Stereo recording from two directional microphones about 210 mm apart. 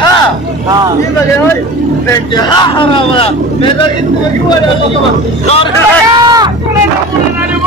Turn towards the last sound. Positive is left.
turn(degrees=-20)  # may be behind; listen again after turning